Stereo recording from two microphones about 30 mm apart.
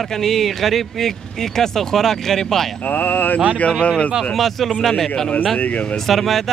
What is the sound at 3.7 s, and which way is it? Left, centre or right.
Speech, left.